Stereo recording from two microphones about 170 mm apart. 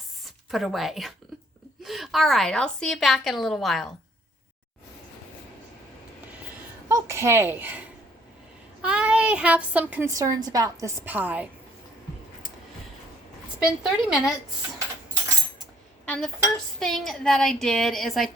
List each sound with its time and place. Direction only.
0.3 s a woman's voice: centre (ahead or behind)
6.8 s a woman's voice: 15° right (ahead or behind)
13.7 s a woman's voice: 5° right (ahead or behind)
16.0 s a woman's voice: 5° left (ahead or behind)